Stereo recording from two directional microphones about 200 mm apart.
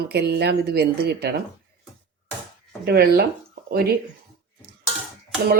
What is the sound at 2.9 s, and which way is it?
Speech, 55° right (ahead or behind).